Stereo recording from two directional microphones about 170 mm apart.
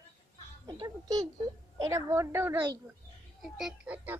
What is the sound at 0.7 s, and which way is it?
A child's voice, 25° right (ahead or behind).